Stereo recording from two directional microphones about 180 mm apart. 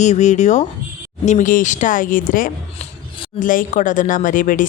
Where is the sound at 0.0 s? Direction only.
40° left (ahead or behind).